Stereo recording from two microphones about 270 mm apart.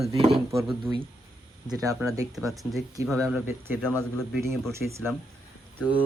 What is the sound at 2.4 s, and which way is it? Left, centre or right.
A man's voice, centre.